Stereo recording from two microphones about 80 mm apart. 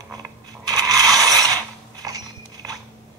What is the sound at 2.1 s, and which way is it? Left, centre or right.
Biting, right.